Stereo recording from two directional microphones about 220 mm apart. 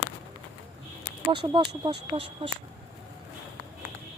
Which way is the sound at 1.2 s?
20° right (ahead or behind).